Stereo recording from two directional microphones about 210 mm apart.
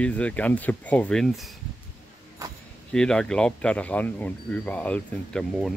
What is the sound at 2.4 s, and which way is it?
Keys jangling, 15° right (ahead or behind).